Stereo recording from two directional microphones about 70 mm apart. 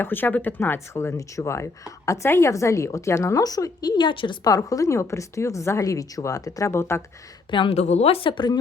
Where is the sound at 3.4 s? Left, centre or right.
Left.